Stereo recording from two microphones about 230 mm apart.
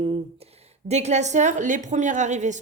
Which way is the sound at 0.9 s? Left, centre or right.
Right.